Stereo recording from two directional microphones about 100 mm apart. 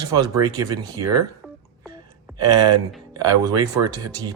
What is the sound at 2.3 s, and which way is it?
Speech, 40° right (ahead or behind).